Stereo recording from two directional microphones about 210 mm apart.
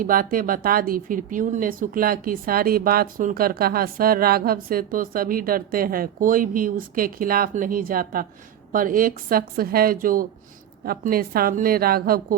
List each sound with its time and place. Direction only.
0.0 s speech: 40° right (ahead or behind)